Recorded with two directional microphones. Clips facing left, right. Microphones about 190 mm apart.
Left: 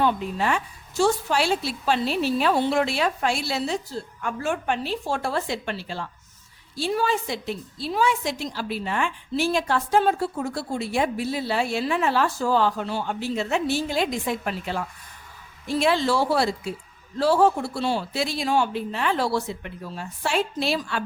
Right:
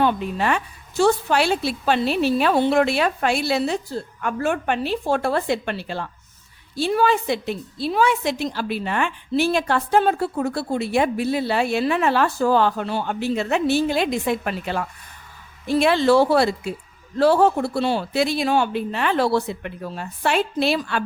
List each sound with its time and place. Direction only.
0.0 s a woman's voice: 65° right (ahead or behind)